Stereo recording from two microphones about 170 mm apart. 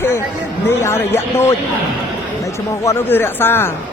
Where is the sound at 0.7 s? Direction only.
15° left (ahead or behind).